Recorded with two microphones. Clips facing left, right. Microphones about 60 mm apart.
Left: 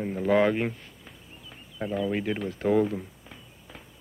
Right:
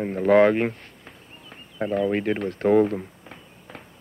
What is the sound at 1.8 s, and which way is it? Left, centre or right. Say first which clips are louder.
Speech: right 5 dB; right.